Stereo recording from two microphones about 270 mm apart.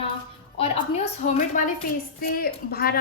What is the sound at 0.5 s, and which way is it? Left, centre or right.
A woman's voice, left.